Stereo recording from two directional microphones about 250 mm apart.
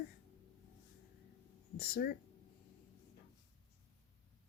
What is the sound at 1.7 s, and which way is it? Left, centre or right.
Speech, left.